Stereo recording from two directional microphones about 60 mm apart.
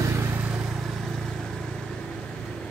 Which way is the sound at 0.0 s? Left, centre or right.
Right.